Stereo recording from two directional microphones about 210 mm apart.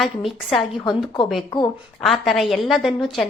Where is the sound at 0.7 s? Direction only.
20° left (ahead or behind).